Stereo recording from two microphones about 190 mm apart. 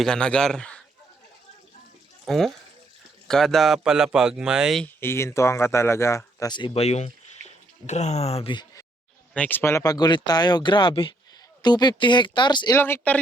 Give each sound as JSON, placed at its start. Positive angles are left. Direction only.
{"t": 0.0, "sound": "speech", "side_deg": 5}
{"t": 2.2, "sound": "speech", "side_deg": 0}
{"t": 4.9, "sound": "speech", "side_deg": 15}
{"t": 9.3, "sound": "speech", "side_deg": 10}
{"t": 12.7, "sound": "speech", "side_deg": 10}